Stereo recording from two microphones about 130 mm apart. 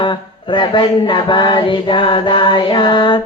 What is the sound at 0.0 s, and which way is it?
Mantra, 40° left (ahead or behind).